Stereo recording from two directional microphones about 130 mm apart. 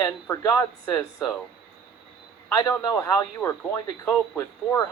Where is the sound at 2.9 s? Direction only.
25° left (ahead or behind).